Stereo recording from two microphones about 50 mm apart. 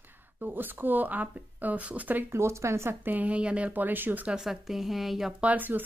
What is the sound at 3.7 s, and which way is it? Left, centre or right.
Speech, right.